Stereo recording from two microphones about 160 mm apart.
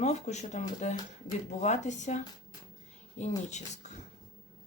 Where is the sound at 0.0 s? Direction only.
45° left (ahead or behind).